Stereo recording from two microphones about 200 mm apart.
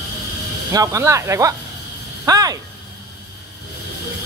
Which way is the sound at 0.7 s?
15° right (ahead or behind).